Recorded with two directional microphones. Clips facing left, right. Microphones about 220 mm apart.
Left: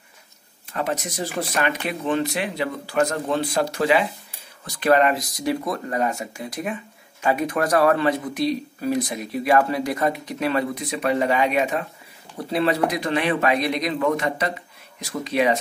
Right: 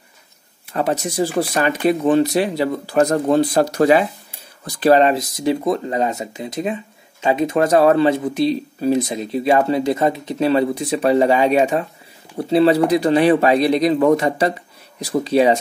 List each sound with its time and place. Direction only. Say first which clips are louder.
0.7 s speech: right 7 dB; 30° right (ahead or behind)
4.7 s speech: right 5 dB; 30° right (ahead or behind)